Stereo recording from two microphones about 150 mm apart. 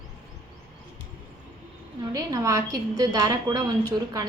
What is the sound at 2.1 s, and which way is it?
A woman's voice, 20° right (ahead or behind).